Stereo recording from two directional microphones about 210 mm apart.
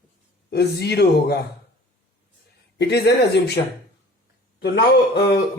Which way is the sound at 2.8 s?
50° left (ahead or behind).